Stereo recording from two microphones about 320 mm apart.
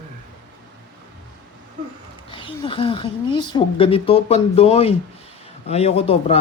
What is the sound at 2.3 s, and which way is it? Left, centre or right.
Speech, centre.